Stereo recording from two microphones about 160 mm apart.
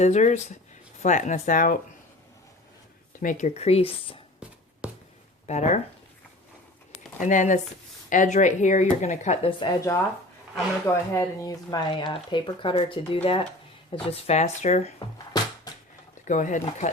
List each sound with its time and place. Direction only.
0.0 s speech: 45° left (ahead or behind)
3.2 s speech: 50° left (ahead or behind)
4.8 s a sound: 5° right (ahead or behind)
5.5 s speech: 45° left (ahead or behind)
7.2 s speech: 50° left (ahead or behind); by 9.6 s 35° left (ahead or behind)
9.6 s speech: 20° left (ahead or behind); by 15.0 s 40° left (ahead or behind)
16.2 s speech: 50° left (ahead or behind)